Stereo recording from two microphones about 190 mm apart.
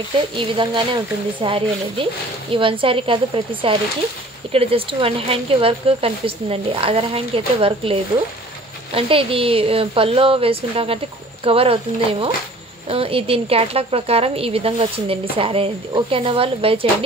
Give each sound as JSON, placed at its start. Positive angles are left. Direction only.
{"t": 0.4, "sound": "speech", "side_deg": -25}
{"t": 4.5, "sound": "speech", "side_deg": -30}